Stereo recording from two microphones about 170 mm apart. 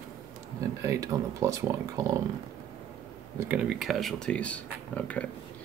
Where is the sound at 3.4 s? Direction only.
10° right (ahead or behind); by 5.2 s 5° left (ahead or behind).